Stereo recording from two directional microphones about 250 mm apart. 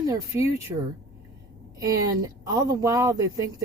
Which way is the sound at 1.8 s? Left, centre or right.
Centre.